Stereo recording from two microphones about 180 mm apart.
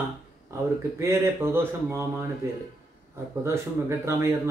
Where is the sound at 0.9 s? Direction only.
15° right (ahead or behind).